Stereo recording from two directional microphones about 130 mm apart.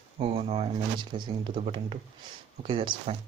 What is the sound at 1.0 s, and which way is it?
Speech, 35° right (ahead or behind).